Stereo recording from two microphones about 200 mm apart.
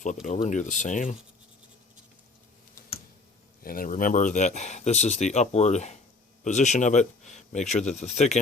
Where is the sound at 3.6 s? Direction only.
45° left (ahead or behind).